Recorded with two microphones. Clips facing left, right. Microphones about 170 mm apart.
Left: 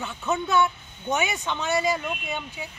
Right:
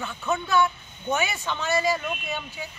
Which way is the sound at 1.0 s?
20° left (ahead or behind).